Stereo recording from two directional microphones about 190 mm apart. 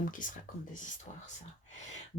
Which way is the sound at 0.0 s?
45° left (ahead or behind).